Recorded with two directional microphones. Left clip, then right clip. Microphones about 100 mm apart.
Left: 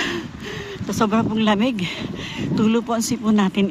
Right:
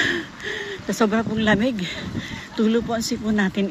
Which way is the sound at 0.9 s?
35° left (ahead or behind).